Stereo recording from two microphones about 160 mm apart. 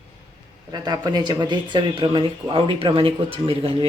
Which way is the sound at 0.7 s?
25° right (ahead or behind).